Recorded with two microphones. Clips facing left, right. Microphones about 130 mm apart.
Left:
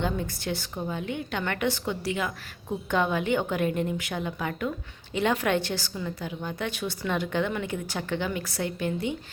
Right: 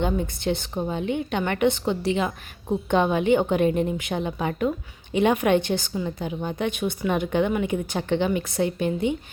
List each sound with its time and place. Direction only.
0.0 s a woman's voice: 20° right (ahead or behind)